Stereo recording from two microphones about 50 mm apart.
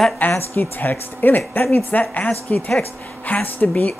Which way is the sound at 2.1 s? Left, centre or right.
Left.